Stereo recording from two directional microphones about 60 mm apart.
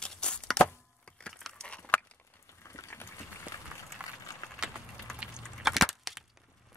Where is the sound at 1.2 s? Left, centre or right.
Centre.